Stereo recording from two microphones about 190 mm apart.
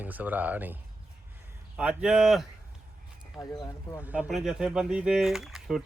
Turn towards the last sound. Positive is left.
turn(degrees=0)  # may be behind; listen again after turning